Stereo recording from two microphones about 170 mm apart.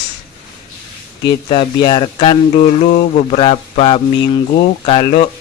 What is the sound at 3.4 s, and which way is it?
Speech, 35° left (ahead or behind).